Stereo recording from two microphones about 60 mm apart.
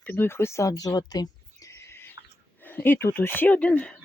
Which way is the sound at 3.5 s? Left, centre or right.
Left.